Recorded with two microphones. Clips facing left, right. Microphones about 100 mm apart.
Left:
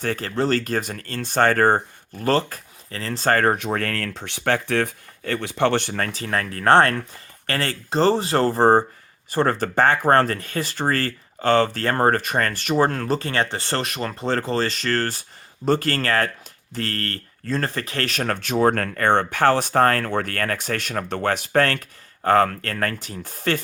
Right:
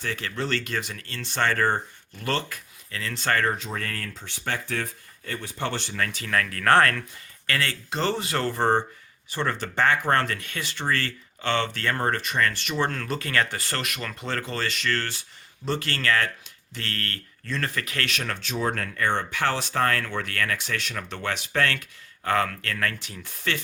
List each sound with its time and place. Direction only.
0.0 s speech: 45° left (ahead or behind)
3.5 s speech: 60° left (ahead or behind)
6.0 s speech: 35° left (ahead or behind)